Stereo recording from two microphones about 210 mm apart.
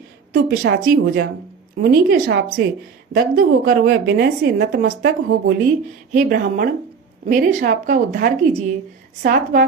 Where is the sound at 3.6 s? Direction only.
50° right (ahead or behind).